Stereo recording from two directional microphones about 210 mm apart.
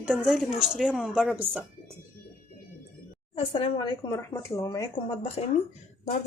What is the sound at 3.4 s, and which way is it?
Speech, 25° left (ahead or behind).